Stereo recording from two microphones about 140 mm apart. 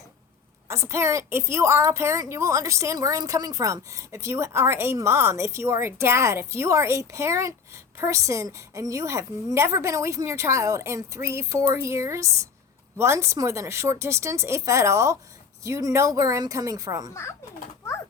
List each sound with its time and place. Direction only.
0.7 s a woman's voice: 20° right (ahead or behind)